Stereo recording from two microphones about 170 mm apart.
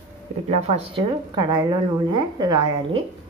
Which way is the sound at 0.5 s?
40° right (ahead or behind).